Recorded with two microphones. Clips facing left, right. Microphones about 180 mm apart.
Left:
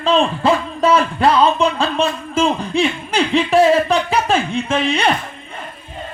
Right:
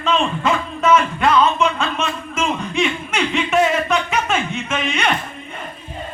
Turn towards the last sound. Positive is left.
turn(degrees=35)  # may be behind; listen again after turning